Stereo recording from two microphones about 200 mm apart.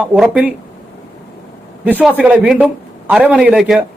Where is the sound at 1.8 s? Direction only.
10° right (ahead or behind).